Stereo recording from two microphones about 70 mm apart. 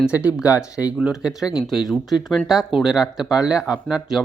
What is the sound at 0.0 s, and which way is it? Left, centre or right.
Speech, centre.